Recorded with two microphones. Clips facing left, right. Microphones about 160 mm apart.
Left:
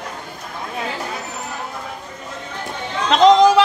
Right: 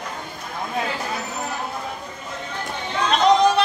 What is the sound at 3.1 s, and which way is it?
Chatter, 90° left.